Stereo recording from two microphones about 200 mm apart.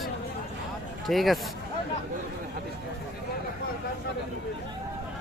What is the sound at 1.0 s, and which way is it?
Speech, centre (ahead or behind).